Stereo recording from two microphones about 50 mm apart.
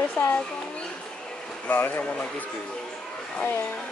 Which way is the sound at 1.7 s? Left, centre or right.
Left.